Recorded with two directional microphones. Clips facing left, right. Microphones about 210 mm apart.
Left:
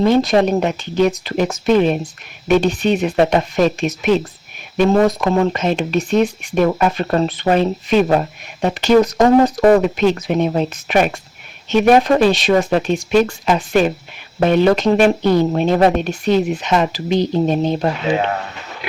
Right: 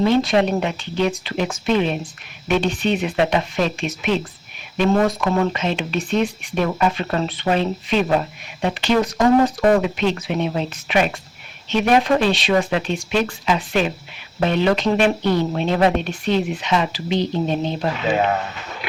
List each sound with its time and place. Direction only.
0.0 s speech: 45° left (ahead or behind)
5.5 s speech: 45° left (ahead or behind)